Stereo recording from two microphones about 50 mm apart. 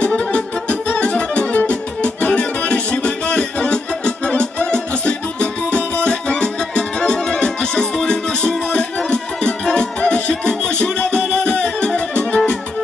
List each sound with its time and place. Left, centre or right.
0.0 s music: left